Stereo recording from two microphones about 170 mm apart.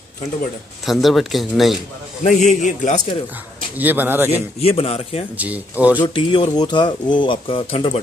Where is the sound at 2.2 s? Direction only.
45° left (ahead or behind).